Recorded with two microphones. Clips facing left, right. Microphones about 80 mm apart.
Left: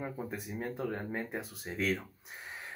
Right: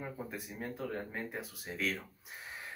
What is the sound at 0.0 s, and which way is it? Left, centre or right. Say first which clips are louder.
Speech: left 3 dB; centre.